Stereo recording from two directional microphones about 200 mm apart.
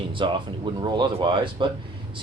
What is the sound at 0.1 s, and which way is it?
Speech, 25° right (ahead or behind).